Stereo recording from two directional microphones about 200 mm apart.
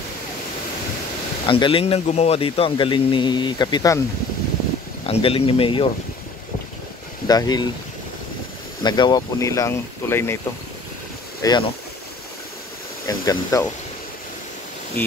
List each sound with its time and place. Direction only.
1.5 s speech: 25° left (ahead or behind)
5.0 s speech: 30° left (ahead or behind)
7.2 s speech: 20° left (ahead or behind)
8.8 s speech: 20° left (ahead or behind)
11.4 s speech: 15° left (ahead or behind)
13.0 s speech: 15° left (ahead or behind)